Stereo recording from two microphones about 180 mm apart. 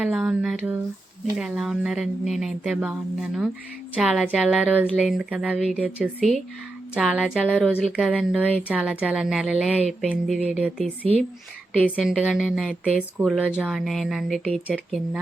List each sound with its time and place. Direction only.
0.0 s speech: 5° right (ahead or behind)